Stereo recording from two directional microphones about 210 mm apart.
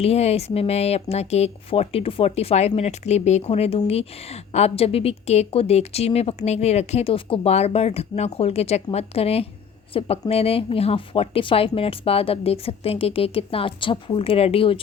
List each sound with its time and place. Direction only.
0.0 s speech: 30° left (ahead or behind)